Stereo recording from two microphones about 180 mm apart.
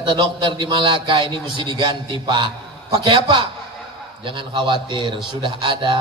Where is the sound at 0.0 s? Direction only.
25° right (ahead or behind).